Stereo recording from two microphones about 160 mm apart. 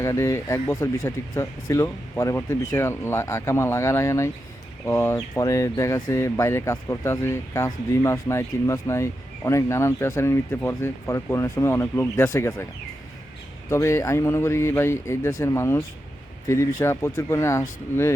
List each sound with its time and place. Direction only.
0.0 s speech: 20° left (ahead or behind)
13.7 s speech: 15° left (ahead or behind)